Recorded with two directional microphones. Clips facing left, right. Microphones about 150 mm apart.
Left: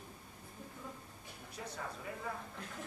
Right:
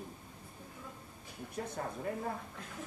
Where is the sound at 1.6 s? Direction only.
45° right (ahead or behind).